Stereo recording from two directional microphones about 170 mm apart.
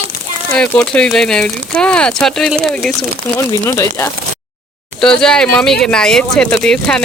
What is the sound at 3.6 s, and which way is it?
Speech, 15° left (ahead or behind).